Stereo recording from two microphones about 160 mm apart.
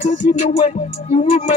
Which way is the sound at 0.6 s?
40° left (ahead or behind).